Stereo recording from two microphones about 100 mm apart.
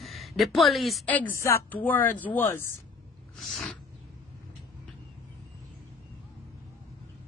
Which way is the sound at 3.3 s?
Centre (ahead or behind).